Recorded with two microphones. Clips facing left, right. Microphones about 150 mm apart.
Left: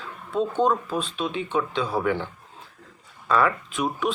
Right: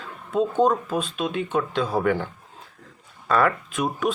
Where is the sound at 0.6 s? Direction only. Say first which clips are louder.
Right 2 dB; 45° right (ahead or behind).